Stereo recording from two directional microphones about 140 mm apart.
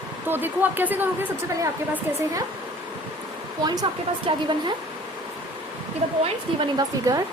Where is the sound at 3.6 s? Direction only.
30° right (ahead or behind).